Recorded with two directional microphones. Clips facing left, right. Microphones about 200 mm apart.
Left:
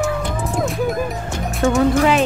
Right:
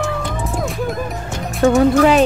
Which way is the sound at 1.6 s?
35° right (ahead or behind).